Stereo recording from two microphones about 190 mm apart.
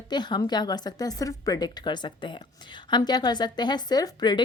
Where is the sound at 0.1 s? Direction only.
20° left (ahead or behind).